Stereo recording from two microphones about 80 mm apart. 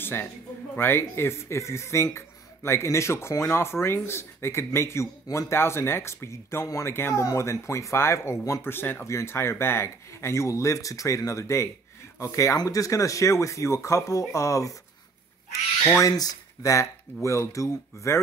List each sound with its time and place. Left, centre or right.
0.0 s speech: left
16.0 s speech: left